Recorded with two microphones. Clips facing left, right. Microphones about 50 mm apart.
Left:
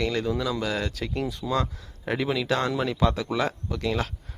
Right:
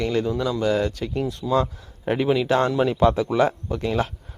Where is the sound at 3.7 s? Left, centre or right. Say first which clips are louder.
Right 3 dB; centre.